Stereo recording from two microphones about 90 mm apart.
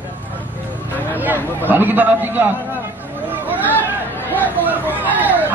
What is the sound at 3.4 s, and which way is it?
Chatter, 20° right (ahead or behind).